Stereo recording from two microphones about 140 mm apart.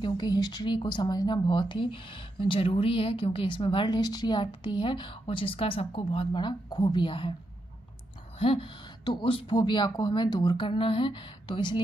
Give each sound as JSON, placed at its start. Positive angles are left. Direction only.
{"t": 0.0, "sound": "speech", "side_deg": 30}
{"t": 8.4, "sound": "speech", "side_deg": 40}